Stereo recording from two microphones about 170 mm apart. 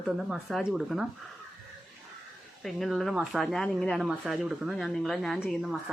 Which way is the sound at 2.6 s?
Centre (ahead or behind).